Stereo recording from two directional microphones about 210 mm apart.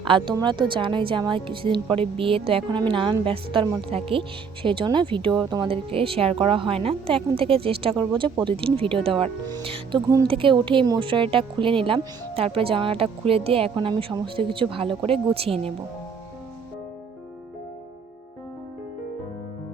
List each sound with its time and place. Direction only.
0.0 s a woman's voice: 25° right (ahead or behind)